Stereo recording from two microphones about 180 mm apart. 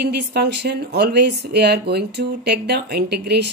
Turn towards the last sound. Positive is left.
turn(degrees=-65)  # may be behind; listen again after turning